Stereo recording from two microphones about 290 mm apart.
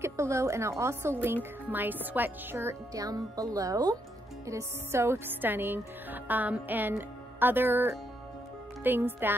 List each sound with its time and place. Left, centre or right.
0.0 s a woman's voice: centre